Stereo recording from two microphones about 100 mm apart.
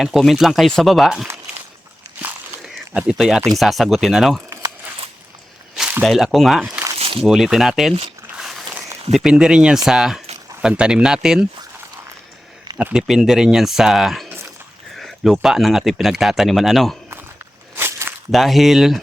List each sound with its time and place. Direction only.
0.0 s speech: centre (ahead or behind)
2.6 s a sound: 5° right (ahead or behind)
3.6 s speech: centre (ahead or behind)
6.1 s speech: centre (ahead or behind)
8.4 s biting: centre (ahead or behind)
9.1 s speech: 5° right (ahead or behind)
12.7 s speech: 10° right (ahead or behind)
17.7 s walk: 25° right (ahead or behind)
18.3 s speech: centre (ahead or behind)